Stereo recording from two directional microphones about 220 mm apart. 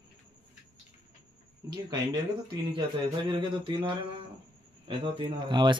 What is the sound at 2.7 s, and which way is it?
Speech, 20° right (ahead or behind).